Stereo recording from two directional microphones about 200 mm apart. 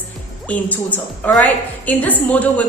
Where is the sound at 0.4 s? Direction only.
10° left (ahead or behind).